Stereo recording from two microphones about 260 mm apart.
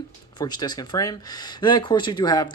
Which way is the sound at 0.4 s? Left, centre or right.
Centre.